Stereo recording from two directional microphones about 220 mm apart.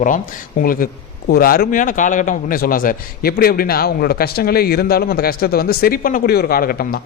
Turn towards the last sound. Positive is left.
turn(degrees=40)  # may be behind; listen again after turning